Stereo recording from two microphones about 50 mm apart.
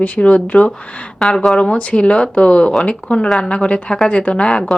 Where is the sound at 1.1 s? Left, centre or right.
Centre.